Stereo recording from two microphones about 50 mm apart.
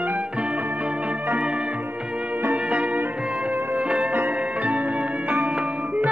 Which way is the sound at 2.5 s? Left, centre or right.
Right.